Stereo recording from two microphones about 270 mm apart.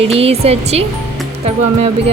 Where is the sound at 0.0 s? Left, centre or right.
Right.